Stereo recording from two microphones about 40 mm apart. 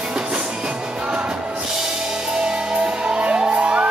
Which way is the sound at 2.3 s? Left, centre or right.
Centre.